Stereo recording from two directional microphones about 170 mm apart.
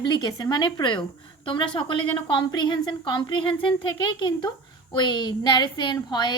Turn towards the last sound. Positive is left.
turn(degrees=25)  # may be behind; listen again after turning